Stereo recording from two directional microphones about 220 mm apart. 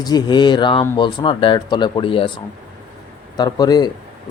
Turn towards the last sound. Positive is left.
turn(degrees=20)  # may be behind; listen again after turning